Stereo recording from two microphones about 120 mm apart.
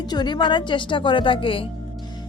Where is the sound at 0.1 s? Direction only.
40° left (ahead or behind).